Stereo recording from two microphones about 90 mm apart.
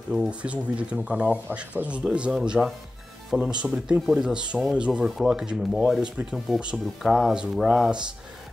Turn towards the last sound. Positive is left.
turn(degrees=-5)  # may be behind; listen again after turning